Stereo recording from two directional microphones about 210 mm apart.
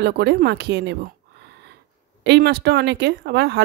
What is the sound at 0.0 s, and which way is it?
Speech, 55° right (ahead or behind).